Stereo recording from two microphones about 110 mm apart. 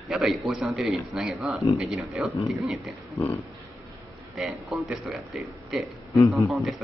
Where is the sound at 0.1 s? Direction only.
Centre (ahead or behind).